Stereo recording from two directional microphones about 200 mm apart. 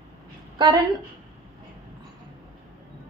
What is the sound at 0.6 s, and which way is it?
Speech, 20° right (ahead or behind).